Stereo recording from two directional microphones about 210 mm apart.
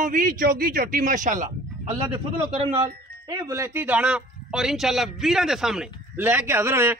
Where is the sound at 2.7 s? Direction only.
25° right (ahead or behind).